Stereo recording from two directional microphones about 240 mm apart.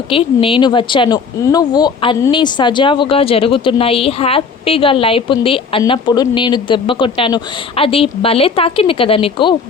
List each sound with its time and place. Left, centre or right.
0.1 s speech: left